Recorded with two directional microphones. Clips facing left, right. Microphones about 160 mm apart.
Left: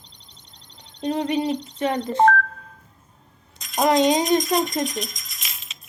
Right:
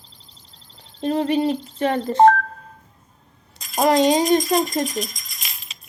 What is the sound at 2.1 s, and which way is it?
Speech, 30° right (ahead or behind).